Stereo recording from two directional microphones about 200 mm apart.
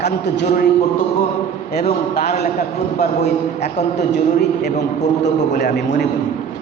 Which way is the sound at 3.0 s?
50° left (ahead or behind).